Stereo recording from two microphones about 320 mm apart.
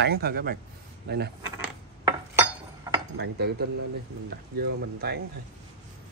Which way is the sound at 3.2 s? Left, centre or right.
Right.